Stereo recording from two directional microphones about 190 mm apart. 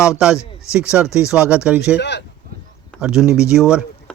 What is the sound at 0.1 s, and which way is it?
Speech, 5° right (ahead or behind).